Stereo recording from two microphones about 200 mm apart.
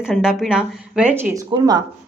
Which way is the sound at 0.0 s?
5° right (ahead or behind).